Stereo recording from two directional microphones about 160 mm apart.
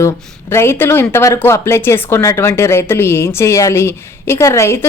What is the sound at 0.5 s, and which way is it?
Speech, 15° left (ahead or behind).